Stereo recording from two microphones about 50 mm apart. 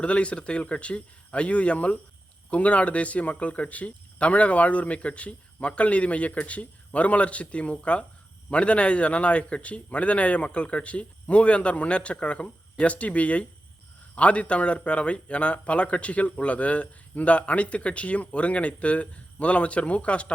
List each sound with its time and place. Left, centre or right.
0.0 s a man's voice: left